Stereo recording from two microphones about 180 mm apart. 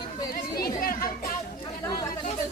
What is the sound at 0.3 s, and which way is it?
Children playing, 55° left (ahead or behind).